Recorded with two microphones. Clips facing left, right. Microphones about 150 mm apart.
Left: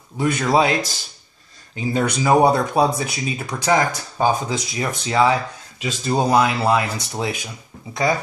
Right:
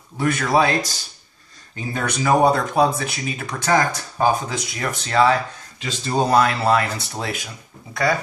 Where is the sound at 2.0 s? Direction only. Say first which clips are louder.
Left 2 dB; 20° left (ahead or behind).